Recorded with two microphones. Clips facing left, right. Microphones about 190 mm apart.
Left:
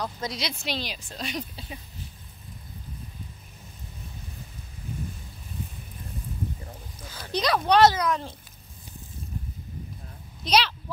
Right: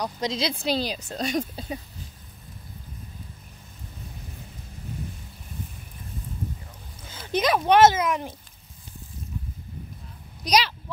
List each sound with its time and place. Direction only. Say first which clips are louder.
0.0 s a woman's voice: right 5 dB; 20° right (ahead or behind); by 1.8 s 45° right (ahead or behind)
7.1 s speech: right 3 dB; 20° right (ahead or behind)
10.4 s speech: right 1 dB; 10° right (ahead or behind)